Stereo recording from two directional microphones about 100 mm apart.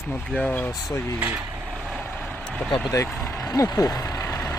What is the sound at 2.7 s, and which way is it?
Speech, 30° left (ahead or behind).